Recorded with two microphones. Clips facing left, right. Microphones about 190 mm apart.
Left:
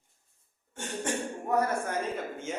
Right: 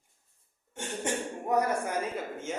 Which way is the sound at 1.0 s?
15° right (ahead or behind).